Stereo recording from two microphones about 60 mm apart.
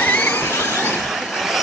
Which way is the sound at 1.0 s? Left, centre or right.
Centre.